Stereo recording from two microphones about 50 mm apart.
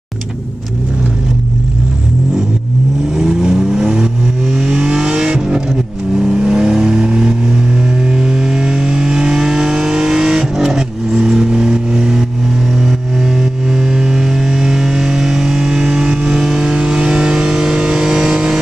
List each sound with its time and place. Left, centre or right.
3.2 s vehicle: centre